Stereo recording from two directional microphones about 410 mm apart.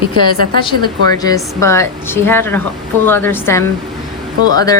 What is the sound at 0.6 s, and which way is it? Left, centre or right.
A woman's voice, centre.